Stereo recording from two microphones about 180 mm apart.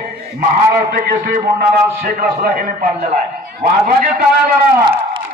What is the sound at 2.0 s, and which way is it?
A man's voice, 55° right (ahead or behind).